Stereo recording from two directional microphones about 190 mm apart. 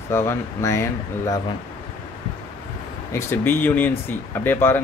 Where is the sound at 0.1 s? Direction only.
15° left (ahead or behind).